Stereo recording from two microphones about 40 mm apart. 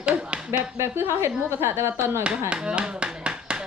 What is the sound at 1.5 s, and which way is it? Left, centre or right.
Speech, right.